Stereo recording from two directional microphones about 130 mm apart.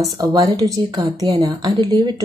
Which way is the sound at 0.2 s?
30° right (ahead or behind).